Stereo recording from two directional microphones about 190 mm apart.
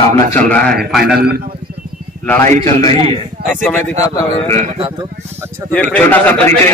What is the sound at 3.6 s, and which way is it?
Speech, 10° left (ahead or behind).